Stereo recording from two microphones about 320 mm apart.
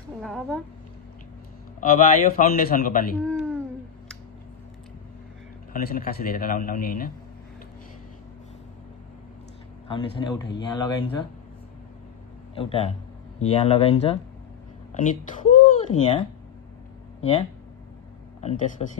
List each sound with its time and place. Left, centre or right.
0.2 s a woman's voice: centre
1.8 s a man's voice: left
3.2 s a sound: centre
5.7 s a man's voice: left
9.8 s speech: centre
12.5 s a man's voice: centre